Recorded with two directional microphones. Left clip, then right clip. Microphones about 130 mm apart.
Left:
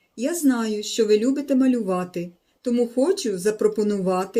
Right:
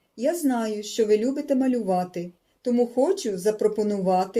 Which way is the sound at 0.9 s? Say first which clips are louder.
Left 2 dB; 70° left (ahead or behind).